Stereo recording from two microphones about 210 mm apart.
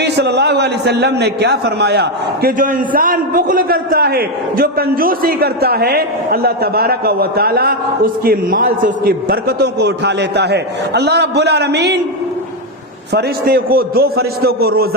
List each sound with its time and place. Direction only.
0.0 s a man's voice: 55° right (ahead or behind)
13.1 s a man's voice: 45° right (ahead or behind)